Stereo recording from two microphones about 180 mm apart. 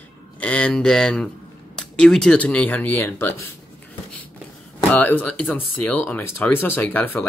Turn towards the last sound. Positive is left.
turn(degrees=10)  # may be behind; listen again after turning